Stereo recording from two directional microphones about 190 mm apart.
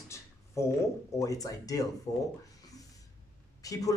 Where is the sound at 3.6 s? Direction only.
20° left (ahead or behind).